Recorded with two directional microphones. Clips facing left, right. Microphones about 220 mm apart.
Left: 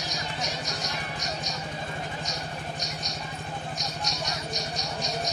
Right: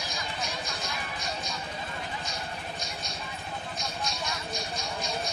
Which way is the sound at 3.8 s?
40° left (ahead or behind).